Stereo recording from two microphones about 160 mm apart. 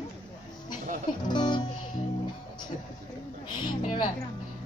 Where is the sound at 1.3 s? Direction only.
30° left (ahead or behind).